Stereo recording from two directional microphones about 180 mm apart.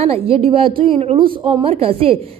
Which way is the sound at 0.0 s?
30° right (ahead or behind).